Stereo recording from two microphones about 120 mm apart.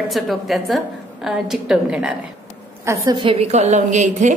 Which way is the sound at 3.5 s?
70° right (ahead or behind).